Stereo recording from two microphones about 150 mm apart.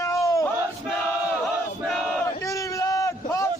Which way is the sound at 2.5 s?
20° left (ahead or behind).